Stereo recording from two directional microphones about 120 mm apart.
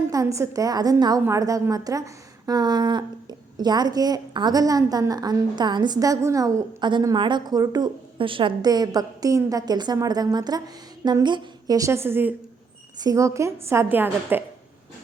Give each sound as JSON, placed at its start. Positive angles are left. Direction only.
{"t": 0.1, "sound": "a woman's voice", "side_deg": -25}
{"t": 8.2, "sound": "a woman's voice", "side_deg": -45}
{"t": 11.8, "sound": "a woman's voice", "side_deg": -20}
{"t": 13.0, "sound": "a woman's voice", "side_deg": -30}